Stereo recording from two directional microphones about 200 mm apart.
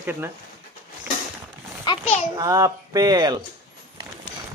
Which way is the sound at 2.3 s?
15° right (ahead or behind).